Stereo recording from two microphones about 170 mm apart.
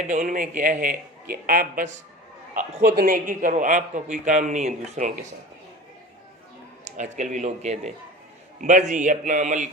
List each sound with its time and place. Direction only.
0.0 s a man's voice: 45° right (ahead or behind)
2.8 s a man's voice: 65° right (ahead or behind); by 5.2 s 45° right (ahead or behind)
6.8 s a man's voice: 45° right (ahead or behind)